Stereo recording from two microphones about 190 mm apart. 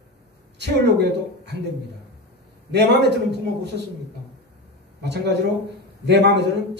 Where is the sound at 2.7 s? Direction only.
60° right (ahead or behind).